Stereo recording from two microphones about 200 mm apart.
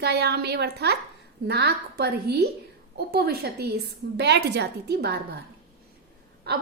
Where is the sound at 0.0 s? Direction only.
55° right (ahead or behind).